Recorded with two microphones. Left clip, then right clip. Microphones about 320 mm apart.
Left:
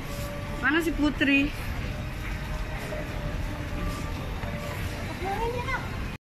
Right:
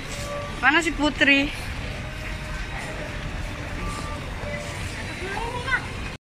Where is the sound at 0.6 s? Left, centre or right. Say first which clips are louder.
Right 5 dB; centre.